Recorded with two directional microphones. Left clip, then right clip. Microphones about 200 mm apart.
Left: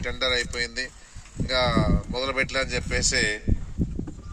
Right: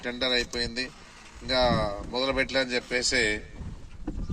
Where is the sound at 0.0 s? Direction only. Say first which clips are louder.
Left 2 dB; 25° right (ahead or behind).